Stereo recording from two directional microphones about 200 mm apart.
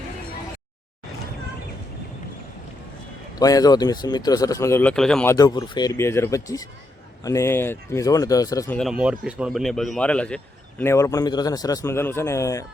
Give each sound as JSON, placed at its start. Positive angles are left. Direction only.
{"t": 3.3, "sound": "a man's voice", "side_deg": 20}
{"t": 8.8, "sound": "a man's voice", "side_deg": -5}